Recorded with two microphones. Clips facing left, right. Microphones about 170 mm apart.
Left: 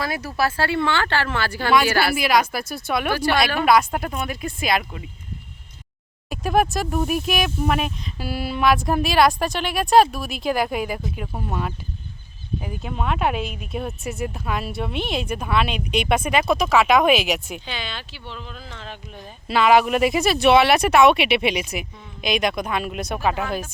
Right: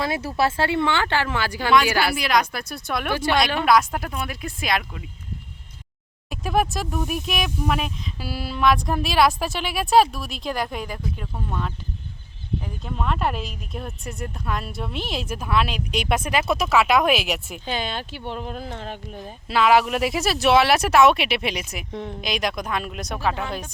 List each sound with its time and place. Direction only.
0.0 s speech: 25° right (ahead or behind)
2.1 s speech: 5° left (ahead or behind)
6.3 s speech: centre (ahead or behind)
11.3 s speech: 25° left (ahead or behind)
12.6 s speech: 5° left (ahead or behind)
17.7 s speech: 45° right (ahead or behind)
19.2 s speech: centre (ahead or behind)